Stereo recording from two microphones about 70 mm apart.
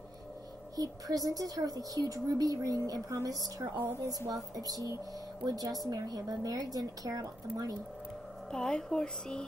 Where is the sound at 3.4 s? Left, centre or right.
Right.